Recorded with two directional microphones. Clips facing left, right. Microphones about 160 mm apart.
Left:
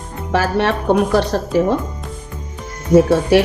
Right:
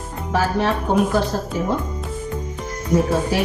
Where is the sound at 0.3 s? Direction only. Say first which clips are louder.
Left 3 dB; 75° left (ahead or behind).